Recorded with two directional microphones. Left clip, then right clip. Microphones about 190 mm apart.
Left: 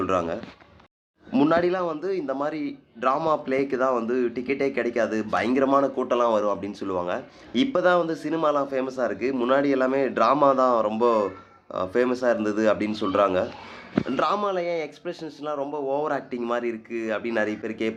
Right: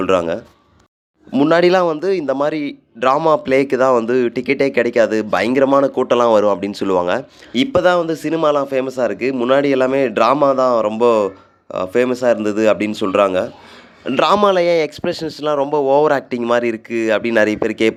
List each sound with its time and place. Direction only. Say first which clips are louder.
0.0 s a man's voice: right 9 dB; 45° right (ahead or behind)
1.5 s a man's voice: right 12 dB; 50° right (ahead or behind)
7.5 s a man's voice: right 7 dB; 35° right (ahead or behind)
14.1 s speech: right 12 dB; 50° right (ahead or behind)